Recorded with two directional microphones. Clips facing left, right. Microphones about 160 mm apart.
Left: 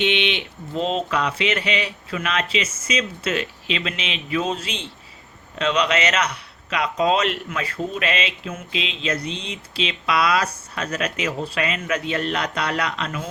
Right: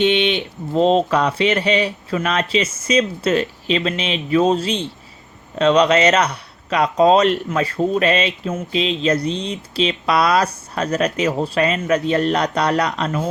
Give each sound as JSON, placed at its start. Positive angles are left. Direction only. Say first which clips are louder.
{"t": 0.0, "sound": "speech", "louder": "right 6 dB", "side_deg": -40}